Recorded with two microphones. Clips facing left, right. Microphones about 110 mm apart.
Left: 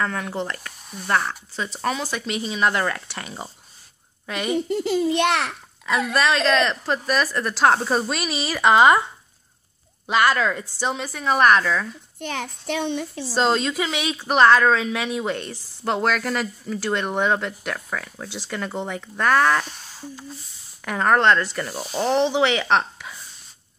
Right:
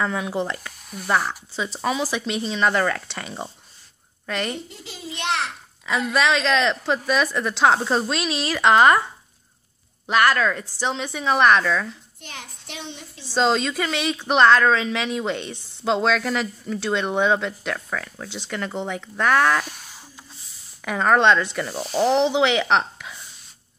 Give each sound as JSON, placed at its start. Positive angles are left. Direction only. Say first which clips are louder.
{"t": 0.0, "sound": "a woman's voice", "louder": "right 2 dB", "side_deg": -10}
{"t": 4.6, "sound": "a woman's voice", "louder": "left 16 dB", "side_deg": 55}
{"t": 6.1, "sound": "a woman's voice", "louder": "even", "side_deg": 0}
{"t": 10.0, "sound": "a woman's voice", "louder": "even", "side_deg": 10}
{"t": 12.2, "sound": "a woman's voice", "louder": "left 10 dB", "side_deg": 60}
{"t": 13.3, "sound": "speech", "louder": "right 1 dB", "side_deg": 5}
{"t": 20.8, "sound": "speech", "louder": "right 1 dB", "side_deg": 0}